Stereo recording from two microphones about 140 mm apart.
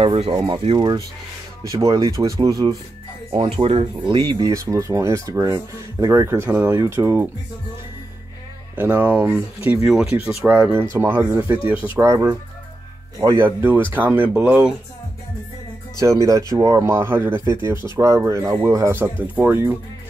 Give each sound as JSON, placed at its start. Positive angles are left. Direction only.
{"t": 0.0, "sound": "speech", "side_deg": -45}
{"t": 0.4, "sound": "speech", "side_deg": -30}
{"t": 3.3, "sound": "speech", "side_deg": -35}
{"t": 8.7, "sound": "speech", "side_deg": -15}
{"t": 16.0, "sound": "speech", "side_deg": -25}